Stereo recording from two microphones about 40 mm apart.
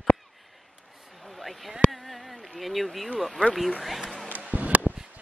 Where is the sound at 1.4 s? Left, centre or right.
Centre.